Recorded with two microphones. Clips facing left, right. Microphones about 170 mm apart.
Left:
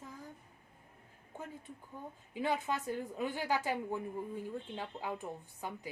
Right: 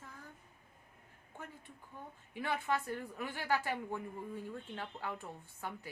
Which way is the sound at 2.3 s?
20° left (ahead or behind).